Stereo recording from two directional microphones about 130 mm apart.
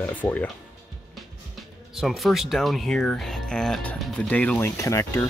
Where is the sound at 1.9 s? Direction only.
Centre (ahead or behind).